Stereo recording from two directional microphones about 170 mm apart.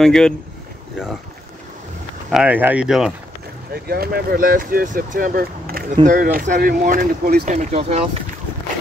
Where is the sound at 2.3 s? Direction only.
5° right (ahead or behind).